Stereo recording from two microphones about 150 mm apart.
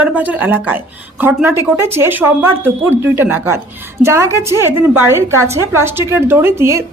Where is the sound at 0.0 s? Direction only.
10° right (ahead or behind).